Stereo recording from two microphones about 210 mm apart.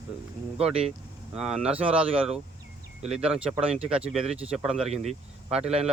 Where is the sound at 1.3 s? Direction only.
5° right (ahead or behind).